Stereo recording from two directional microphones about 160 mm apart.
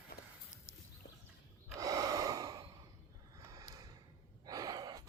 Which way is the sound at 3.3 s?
20° right (ahead or behind).